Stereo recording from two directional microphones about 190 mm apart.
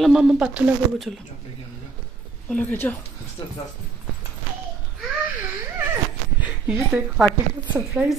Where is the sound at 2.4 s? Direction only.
10° left (ahead or behind).